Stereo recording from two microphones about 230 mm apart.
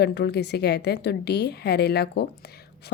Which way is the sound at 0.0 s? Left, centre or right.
Left.